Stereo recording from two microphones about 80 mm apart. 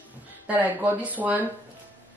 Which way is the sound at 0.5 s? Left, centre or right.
Centre.